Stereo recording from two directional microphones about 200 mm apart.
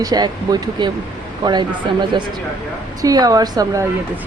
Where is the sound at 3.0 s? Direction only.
20° right (ahead or behind).